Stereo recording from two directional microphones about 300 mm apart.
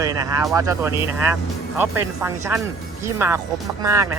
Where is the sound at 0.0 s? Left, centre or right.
Centre.